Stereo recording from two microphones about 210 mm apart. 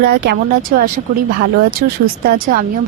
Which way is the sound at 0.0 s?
50° right (ahead or behind).